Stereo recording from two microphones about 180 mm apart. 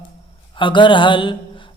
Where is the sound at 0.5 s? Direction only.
25° left (ahead or behind).